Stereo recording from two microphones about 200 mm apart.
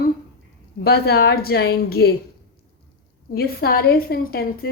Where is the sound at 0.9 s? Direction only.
55° left (ahead or behind).